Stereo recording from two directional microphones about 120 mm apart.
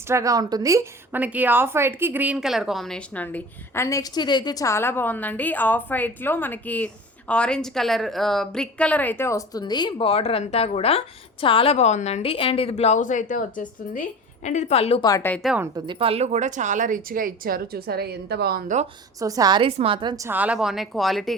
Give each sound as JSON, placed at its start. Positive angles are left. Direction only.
{"t": 0.1, "sound": "a woman's voice", "side_deg": -30}
{"t": 1.1, "sound": "speech", "side_deg": -15}
{"t": 3.8, "sound": "a woman's voice", "side_deg": 30}
{"t": 10.1, "sound": "a woman's voice", "side_deg": 55}
{"t": 15.7, "sound": "speech", "side_deg": -45}
{"t": 18.7, "sound": "a woman's voice", "side_deg": -90}
{"t": 19.2, "sound": "a woman's voice", "side_deg": -30}
{"t": 19.6, "sound": "a woman's voice", "side_deg": -50}
{"t": 20.3, "sound": "a woman's voice", "side_deg": -10}